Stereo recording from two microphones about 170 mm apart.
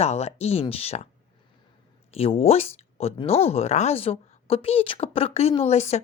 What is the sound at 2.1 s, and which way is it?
Speech, 35° left (ahead or behind).